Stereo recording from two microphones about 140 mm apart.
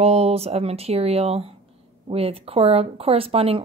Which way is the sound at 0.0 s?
45° right (ahead or behind).